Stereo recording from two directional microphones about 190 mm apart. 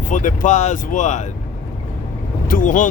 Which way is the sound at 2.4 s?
45° left (ahead or behind).